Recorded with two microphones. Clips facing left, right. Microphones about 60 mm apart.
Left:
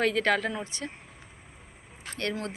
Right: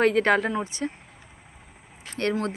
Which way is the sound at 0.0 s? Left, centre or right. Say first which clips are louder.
Right 5 dB; right.